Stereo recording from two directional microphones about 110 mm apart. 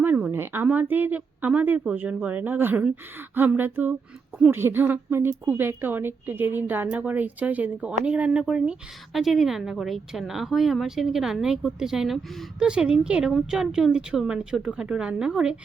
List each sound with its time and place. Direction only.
0.0 s a woman's voice: 15° right (ahead or behind)